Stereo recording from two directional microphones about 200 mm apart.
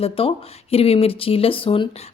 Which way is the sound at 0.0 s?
30° left (ahead or behind).